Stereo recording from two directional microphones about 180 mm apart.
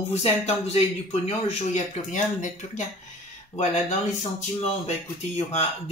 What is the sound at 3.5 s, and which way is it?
Speech, 40° left (ahead or behind).